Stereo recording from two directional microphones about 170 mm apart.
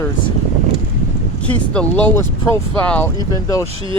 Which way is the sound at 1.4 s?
5° left (ahead or behind).